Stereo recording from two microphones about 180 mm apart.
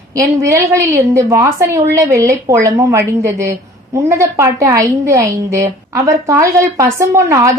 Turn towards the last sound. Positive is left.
turn(degrees=-15)  # may be behind; listen again after turning